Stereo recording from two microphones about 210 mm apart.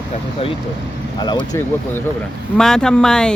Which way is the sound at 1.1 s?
20° left (ahead or behind).